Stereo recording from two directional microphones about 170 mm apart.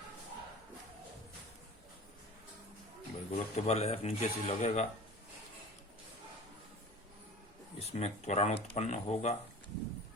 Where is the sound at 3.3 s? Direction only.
40° left (ahead or behind).